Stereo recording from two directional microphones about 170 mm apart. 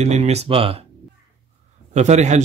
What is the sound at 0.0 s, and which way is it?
Speech, 40° right (ahead or behind).